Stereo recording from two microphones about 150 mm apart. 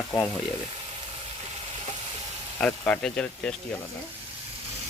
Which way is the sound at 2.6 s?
5° left (ahead or behind).